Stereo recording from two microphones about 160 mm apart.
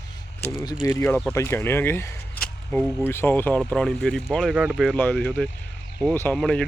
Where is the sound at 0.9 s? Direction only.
15° left (ahead or behind).